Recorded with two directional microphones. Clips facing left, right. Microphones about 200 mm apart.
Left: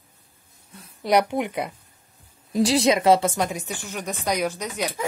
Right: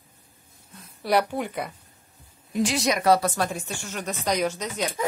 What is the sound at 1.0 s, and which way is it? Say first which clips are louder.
Speech: left 3 dB; 20° left (ahead or behind).